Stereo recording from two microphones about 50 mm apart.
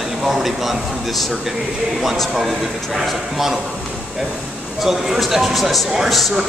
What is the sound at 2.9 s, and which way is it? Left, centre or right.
Speech, centre.